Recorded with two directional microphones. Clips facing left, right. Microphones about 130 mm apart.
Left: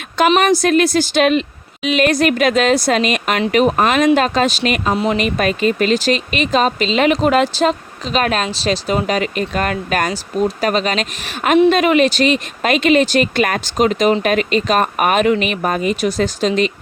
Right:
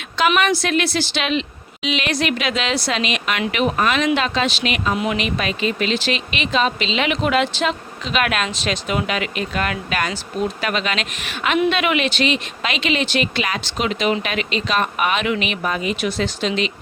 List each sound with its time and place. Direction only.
0.3 s speech: 40° left (ahead or behind)